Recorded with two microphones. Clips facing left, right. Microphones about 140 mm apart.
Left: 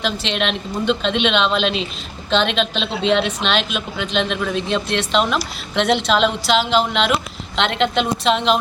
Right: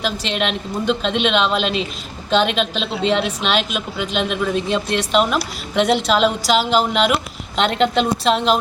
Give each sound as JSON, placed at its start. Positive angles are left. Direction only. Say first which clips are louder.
{"t": 0.0, "sound": "a woman's voice", "louder": "even", "side_deg": -5}
{"t": 7.5, "sound": "a woman's voice", "louder": "right 2 dB", "side_deg": -40}
{"t": 7.9, "sound": "a woman's voice", "louder": "right 1 dB", "side_deg": 0}